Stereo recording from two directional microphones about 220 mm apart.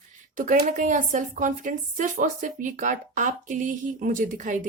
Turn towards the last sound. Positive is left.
turn(degrees=-35)  # may be behind; listen again after turning